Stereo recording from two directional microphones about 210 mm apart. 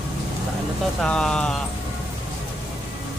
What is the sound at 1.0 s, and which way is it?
Speech, 5° left (ahead or behind).